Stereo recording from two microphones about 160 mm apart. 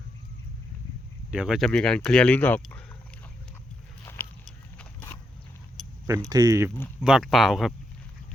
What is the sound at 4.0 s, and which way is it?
Rowboat, 15° left (ahead or behind).